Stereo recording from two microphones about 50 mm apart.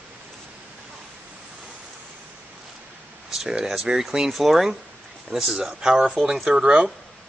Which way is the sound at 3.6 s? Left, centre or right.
Centre.